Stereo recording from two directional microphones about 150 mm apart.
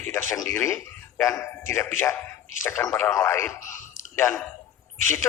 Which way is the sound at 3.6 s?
60° left (ahead or behind).